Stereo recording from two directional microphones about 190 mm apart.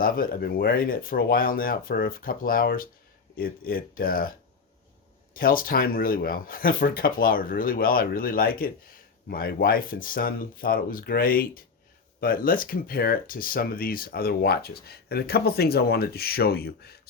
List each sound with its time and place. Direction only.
0.0 s speech: 50° left (ahead or behind)